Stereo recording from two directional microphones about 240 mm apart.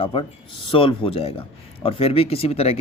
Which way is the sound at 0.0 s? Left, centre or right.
Left.